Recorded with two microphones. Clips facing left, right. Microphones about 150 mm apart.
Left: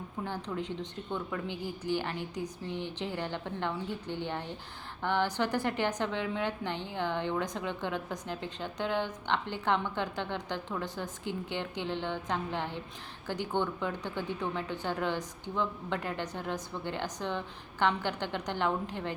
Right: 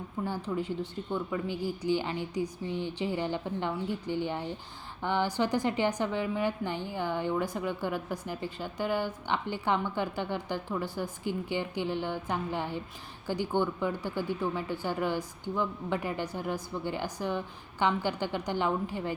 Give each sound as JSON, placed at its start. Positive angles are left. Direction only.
{"t": 0.3, "sound": "a woman's voice", "side_deg": -5}